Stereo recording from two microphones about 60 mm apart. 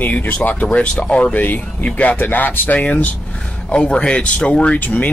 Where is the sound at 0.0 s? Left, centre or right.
Left.